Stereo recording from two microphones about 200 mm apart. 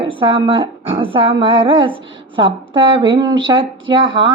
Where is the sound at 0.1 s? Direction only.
25° right (ahead or behind).